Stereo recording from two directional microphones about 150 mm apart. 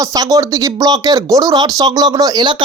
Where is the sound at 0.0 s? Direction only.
25° right (ahead or behind).